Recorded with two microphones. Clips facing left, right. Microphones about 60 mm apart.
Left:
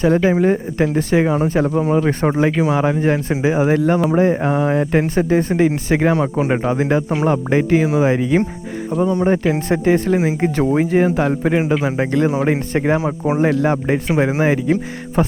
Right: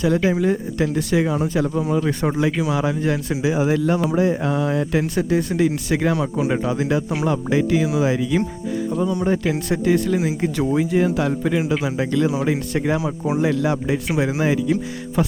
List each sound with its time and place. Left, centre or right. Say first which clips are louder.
0.0 s speech: left 4 dB; left